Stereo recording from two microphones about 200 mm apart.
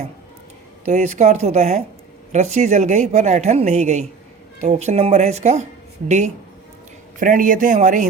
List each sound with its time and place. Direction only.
0.9 s speech: 35° right (ahead or behind)